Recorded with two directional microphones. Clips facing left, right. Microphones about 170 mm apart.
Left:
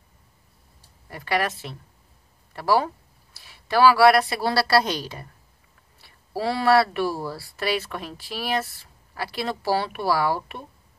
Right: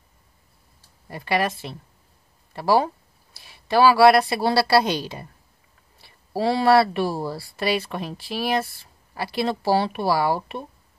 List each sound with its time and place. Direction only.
1.0 s speech: 20° right (ahead or behind)
6.3 s speech: 25° right (ahead or behind)